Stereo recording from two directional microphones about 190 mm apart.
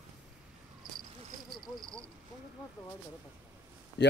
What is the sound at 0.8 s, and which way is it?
Cricket, 50° right (ahead or behind).